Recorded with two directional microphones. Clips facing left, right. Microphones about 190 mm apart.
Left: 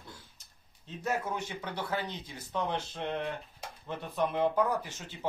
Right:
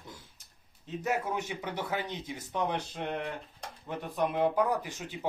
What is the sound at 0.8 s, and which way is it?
Speech, 15° right (ahead or behind).